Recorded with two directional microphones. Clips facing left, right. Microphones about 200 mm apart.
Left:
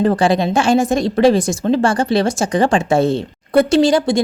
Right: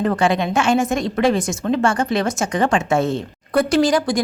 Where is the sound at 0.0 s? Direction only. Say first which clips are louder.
Left 4 dB; 30° left (ahead or behind).